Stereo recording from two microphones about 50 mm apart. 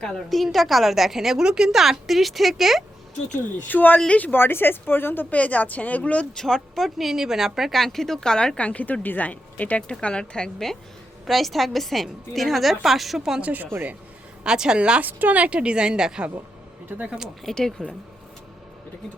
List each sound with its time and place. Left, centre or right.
0.3 s a woman's voice: centre
3.7 s speech: left
4.4 s a woman's voice: left
6.3 s a woman's voice: centre
7.1 s a woman's voice: centre
8.6 s speech: left
10.0 s a woman's voice: centre
11.3 s a woman's voice: centre
13.4 s speech: right
14.4 s a woman's voice: centre
15.0 s a woman's voice: right; by 16.2 s centre
17.4 s a woman's voice: centre